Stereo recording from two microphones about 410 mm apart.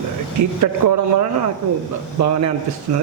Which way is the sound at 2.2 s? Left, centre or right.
Right.